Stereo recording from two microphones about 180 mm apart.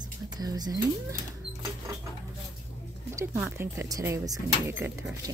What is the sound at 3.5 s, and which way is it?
Speech, 15° right (ahead or behind).